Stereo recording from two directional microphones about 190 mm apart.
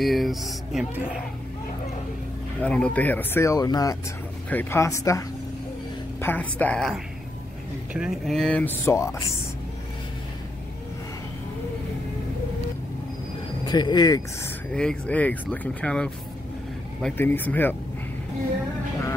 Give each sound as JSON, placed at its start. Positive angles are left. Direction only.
{"t": 0.0, "sound": "speech", "side_deg": 0}
{"t": 2.6, "sound": "speech", "side_deg": 5}
{"t": 6.2, "sound": "speech", "side_deg": 10}
{"t": 13.7, "sound": "speech", "side_deg": 20}
{"t": 14.7, "sound": "speech", "side_deg": 5}